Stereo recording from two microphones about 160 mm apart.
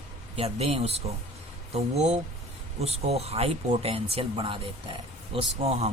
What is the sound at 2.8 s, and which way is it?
Speech, 40° right (ahead or behind).